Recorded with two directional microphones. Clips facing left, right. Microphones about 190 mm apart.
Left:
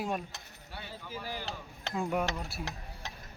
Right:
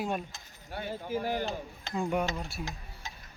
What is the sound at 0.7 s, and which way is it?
Speech, 50° right (ahead or behind).